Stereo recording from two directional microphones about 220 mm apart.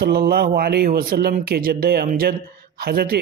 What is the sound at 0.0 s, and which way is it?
Speech, 45° right (ahead or behind).